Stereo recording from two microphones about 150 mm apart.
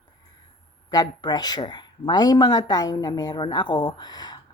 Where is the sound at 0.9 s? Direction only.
30° left (ahead or behind).